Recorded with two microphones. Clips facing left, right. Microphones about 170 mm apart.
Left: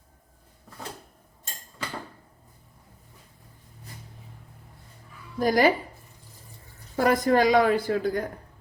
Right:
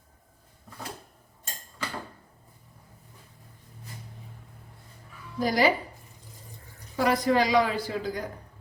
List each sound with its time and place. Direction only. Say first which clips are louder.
5.4 s a woman's voice: left 3 dB; 50° left (ahead or behind)
6.9 s a woman's voice: left 2 dB; 45° left (ahead or behind)